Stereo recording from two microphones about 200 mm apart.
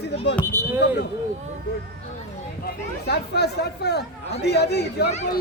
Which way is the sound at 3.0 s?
55° left (ahead or behind).